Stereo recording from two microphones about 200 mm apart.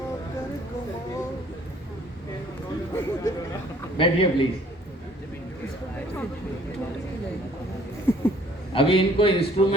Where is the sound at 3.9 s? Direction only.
25° left (ahead or behind).